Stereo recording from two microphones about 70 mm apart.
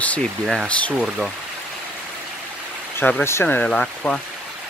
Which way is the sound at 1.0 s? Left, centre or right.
Centre.